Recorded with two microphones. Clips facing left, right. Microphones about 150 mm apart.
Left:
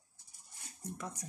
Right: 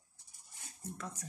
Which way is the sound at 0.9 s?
15° left (ahead or behind).